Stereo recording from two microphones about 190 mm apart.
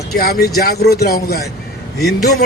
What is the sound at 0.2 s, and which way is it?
Speech, 55° left (ahead or behind).